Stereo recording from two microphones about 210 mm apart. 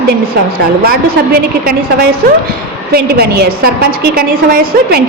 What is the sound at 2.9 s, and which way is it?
A woman's voice, 50° right (ahead or behind).